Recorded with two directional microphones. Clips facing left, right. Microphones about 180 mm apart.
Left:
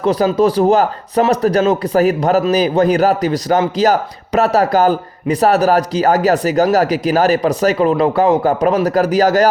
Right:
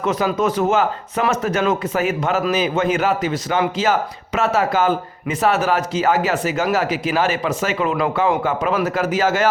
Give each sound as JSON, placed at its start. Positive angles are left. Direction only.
{"t": 0.0, "sound": "speech", "side_deg": 35}